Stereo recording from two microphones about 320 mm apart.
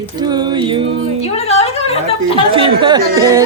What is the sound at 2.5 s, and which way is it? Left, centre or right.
Music, centre.